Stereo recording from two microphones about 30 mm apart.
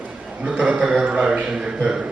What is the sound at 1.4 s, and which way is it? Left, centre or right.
Speech, right.